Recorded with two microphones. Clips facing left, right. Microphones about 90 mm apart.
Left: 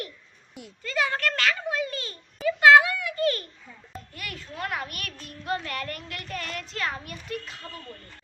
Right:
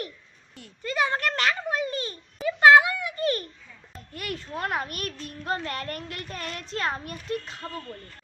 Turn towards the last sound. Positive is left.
turn(degrees=-35)  # may be behind; listen again after turning